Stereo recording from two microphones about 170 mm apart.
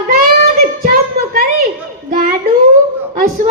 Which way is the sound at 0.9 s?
60° right (ahead or behind).